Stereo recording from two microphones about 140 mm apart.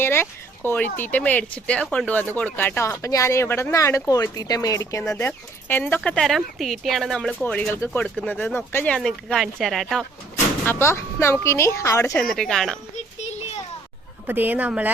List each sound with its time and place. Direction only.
0.0 s speech: 15° left (ahead or behind)
6.1 s speech: 5° left (ahead or behind)
9.0 s speech: centre (ahead or behind)
10.7 s speech: 15° left (ahead or behind)
12.1 s speech: 5° left (ahead or behind)
14.3 s a woman's voice: 15° right (ahead or behind)